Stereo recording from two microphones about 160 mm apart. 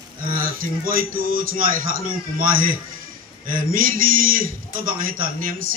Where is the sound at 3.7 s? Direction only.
60° right (ahead or behind).